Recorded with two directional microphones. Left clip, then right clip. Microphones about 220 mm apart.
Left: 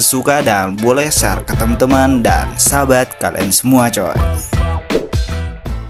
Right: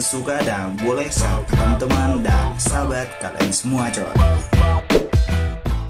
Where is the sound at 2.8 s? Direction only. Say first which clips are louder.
Left 14 dB; 50° left (ahead or behind).